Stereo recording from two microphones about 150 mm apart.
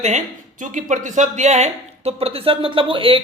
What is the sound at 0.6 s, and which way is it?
Speech, 55° right (ahead or behind).